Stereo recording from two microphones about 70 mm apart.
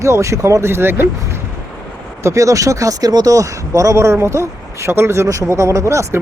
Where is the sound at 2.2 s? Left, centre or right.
Right.